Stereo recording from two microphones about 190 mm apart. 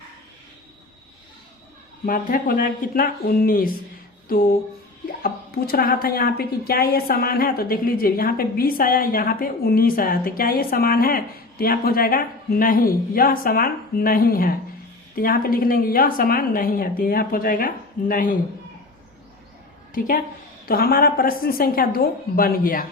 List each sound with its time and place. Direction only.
2.0 s a woman's voice: 45° left (ahead or behind)
5.2 s a woman's voice: 55° left (ahead or behind)
19.9 s a woman's voice: 45° left (ahead or behind)